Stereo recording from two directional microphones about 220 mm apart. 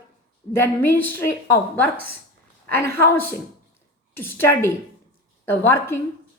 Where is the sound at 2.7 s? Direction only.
10° left (ahead or behind).